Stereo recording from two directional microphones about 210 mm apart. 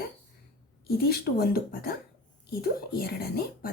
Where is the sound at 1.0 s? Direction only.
45° left (ahead or behind).